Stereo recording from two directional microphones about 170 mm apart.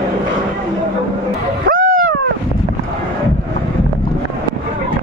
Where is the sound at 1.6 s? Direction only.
55° right (ahead or behind).